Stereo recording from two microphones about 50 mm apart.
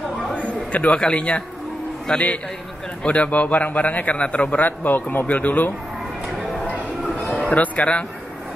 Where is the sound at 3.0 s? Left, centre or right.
Left.